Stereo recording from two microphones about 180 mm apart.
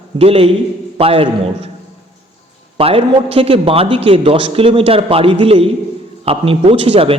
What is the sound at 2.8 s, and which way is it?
A man's voice, 30° right (ahead or behind).